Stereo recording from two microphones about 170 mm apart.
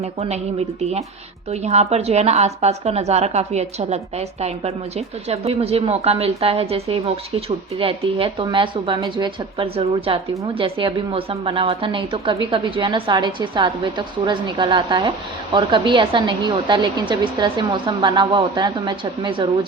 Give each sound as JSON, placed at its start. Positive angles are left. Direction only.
{"t": 0.0, "sound": "a woman's voice", "side_deg": -40}